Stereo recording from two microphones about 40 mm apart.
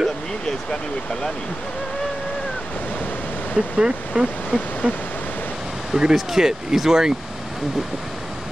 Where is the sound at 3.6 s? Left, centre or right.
Right.